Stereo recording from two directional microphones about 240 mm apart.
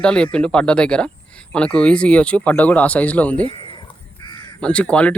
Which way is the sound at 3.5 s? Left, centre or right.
Left.